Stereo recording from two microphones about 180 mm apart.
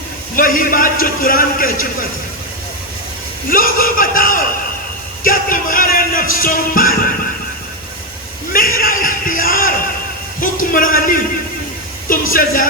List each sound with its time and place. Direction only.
0.3 s a man's voice: 50° left (ahead or behind)
3.5 s a man's voice: 50° left (ahead or behind)
5.2 s music: 50° left (ahead or behind)
8.5 s a sound: 50° left (ahead or behind)
10.4 s a man's voice: 50° left (ahead or behind)
12.3 s a man's voice: 50° left (ahead or behind)